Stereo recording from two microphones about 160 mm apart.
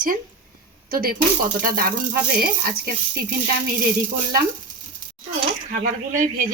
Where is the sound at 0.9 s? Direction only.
65° right (ahead or behind).